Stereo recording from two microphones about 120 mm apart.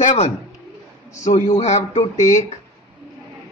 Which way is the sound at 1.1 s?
90° left.